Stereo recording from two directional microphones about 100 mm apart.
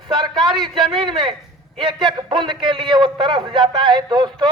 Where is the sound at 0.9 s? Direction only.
50° right (ahead or behind).